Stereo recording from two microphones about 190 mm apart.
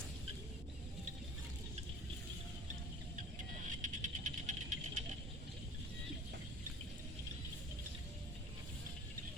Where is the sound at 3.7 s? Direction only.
40° right (ahead or behind).